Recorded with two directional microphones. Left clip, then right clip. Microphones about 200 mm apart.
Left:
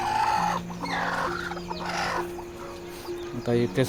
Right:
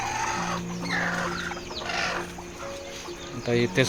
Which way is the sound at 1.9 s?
60° left (ahead or behind).